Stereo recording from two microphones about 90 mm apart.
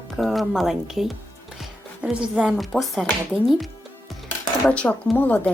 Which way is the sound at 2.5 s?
Centre (ahead or behind).